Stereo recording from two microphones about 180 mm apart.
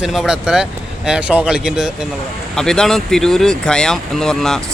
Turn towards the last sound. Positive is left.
turn(degrees=5)  # may be behind; listen again after turning